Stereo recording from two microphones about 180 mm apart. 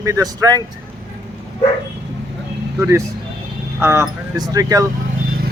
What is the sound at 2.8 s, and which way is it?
Speech, 15° right (ahead or behind).